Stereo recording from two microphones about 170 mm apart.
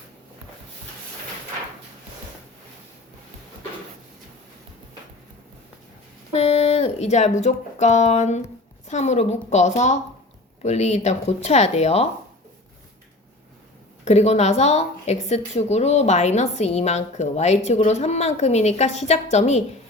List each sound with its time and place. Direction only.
6.3 s speech: 40° left (ahead or behind)
14.0 s speech: 40° left (ahead or behind)